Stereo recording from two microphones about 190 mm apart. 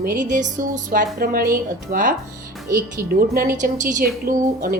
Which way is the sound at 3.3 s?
45° right (ahead or behind).